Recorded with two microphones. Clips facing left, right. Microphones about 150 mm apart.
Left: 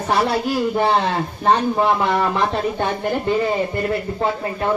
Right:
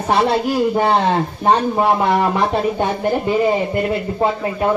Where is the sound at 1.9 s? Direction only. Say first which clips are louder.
Right 3 dB; 20° right (ahead or behind).